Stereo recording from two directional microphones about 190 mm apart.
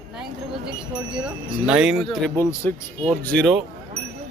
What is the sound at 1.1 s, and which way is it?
Speech, 5° right (ahead or behind).